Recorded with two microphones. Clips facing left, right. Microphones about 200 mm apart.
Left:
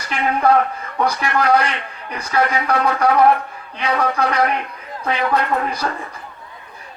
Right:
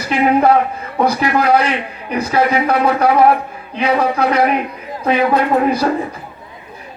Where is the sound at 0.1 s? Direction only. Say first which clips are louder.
Right 5 dB; 20° right (ahead or behind).